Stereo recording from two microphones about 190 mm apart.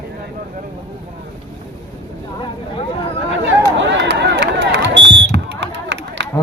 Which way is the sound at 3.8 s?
70° right (ahead or behind).